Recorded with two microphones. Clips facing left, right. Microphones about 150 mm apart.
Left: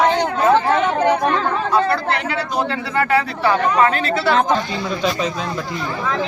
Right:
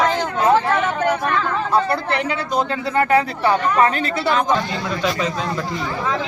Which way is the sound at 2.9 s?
20° right (ahead or behind).